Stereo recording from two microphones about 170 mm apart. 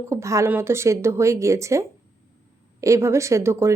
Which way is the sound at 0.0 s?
15° right (ahead or behind).